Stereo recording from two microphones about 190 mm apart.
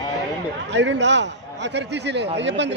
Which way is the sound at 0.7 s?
65° right (ahead or behind).